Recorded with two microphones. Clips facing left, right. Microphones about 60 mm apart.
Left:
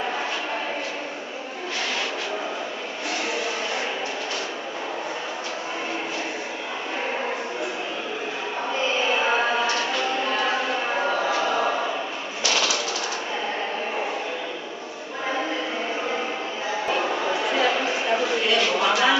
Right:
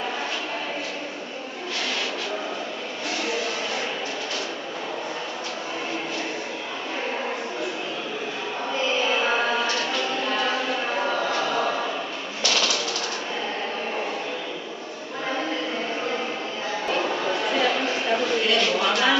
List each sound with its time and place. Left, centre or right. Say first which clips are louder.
8.8 s music: even; centre
12.4 s typewriter: left 1 dB; centre
16.8 s a sound: even; centre